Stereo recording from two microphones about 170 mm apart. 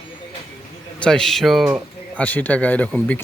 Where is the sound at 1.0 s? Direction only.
5° left (ahead or behind).